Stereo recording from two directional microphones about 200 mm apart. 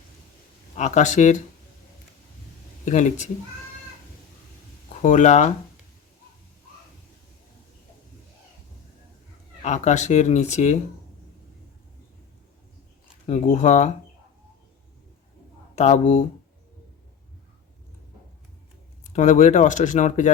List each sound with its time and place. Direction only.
0.8 s speech: 35° left (ahead or behind)
2.8 s speech: 35° left (ahead or behind)
5.0 s speech: 35° left (ahead or behind)
9.6 s speech: 35° left (ahead or behind)
13.2 s speech: 35° left (ahead or behind)
15.7 s speech: 35° left (ahead or behind)
19.1 s speech: 35° left (ahead or behind)